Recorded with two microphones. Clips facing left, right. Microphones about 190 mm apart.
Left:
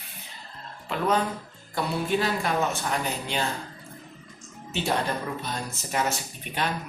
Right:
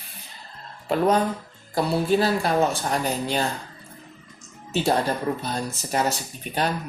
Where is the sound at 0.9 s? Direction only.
40° right (ahead or behind).